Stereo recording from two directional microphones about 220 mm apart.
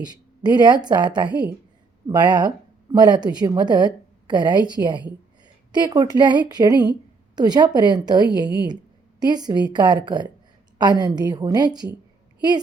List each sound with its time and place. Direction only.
0.0 s a woman's voice: 20° right (ahead or behind)